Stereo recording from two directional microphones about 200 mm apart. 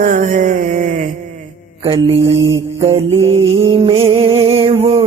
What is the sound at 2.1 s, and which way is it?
Mantra, 70° right (ahead or behind).